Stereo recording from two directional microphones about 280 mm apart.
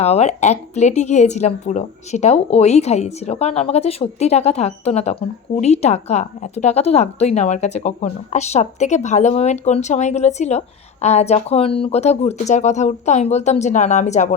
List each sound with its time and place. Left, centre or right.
0.0 s a woman's voice: left